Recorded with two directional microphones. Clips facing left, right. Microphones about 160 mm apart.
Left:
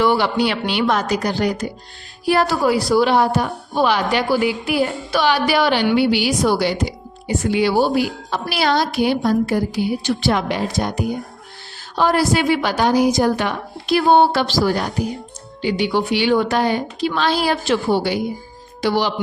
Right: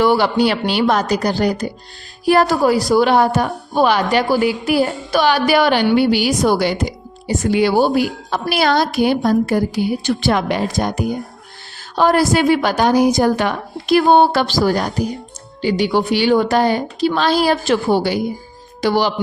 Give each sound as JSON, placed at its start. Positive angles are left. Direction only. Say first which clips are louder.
{"t": 0.0, "sound": "a woman's voice", "louder": "right 3 dB", "side_deg": -40}